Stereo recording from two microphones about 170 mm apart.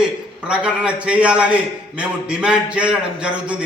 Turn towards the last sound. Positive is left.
turn(degrees=-5)  # may be behind; listen again after turning